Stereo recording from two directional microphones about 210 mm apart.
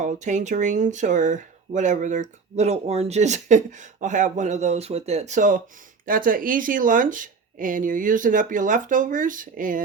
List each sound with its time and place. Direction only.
0.0 s speech: 35° right (ahead or behind)